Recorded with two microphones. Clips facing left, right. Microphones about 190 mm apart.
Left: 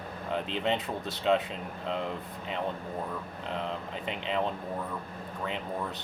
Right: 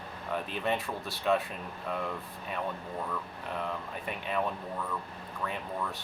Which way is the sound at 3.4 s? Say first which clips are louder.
Left 2 dB; 20° left (ahead or behind).